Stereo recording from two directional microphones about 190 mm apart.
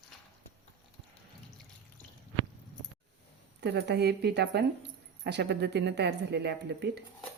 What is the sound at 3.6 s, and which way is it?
A woman's voice, 60° right (ahead or behind).